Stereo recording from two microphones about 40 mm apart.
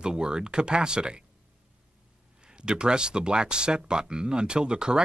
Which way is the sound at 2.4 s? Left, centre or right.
Right.